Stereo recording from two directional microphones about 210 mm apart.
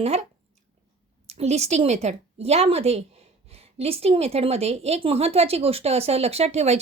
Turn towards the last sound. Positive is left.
turn(degrees=-30)  # may be behind; listen again after turning